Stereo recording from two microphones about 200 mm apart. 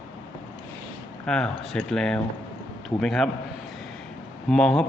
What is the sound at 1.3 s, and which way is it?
Speech, 5° left (ahead or behind).